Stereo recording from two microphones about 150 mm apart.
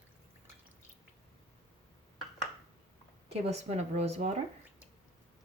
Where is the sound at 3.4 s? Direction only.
45° right (ahead or behind).